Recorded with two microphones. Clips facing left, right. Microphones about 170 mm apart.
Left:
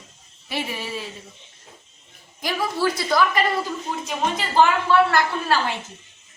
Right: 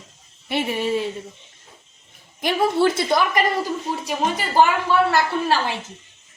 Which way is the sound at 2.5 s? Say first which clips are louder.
Right 5 dB; 25° right (ahead or behind).